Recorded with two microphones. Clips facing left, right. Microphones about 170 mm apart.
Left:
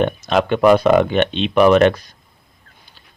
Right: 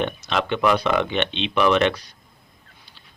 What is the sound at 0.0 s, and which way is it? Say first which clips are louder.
Speech: left 7 dB; 45° left (ahead or behind).